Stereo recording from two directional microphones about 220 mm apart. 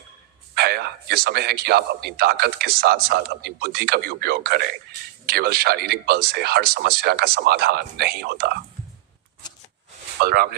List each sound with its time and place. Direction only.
0.5 s a man's voice: 45° right (ahead or behind)
10.2 s a man's voice: 45° right (ahead or behind)